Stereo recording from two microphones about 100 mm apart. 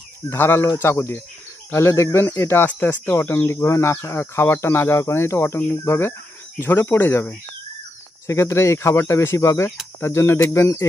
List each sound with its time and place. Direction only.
0.3 s speech: 25° left (ahead or behind)